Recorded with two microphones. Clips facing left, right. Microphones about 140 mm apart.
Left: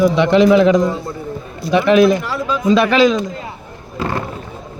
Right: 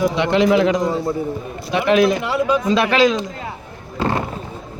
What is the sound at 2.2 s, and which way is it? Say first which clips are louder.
Speech: right 3 dB; 20° right (ahead or behind).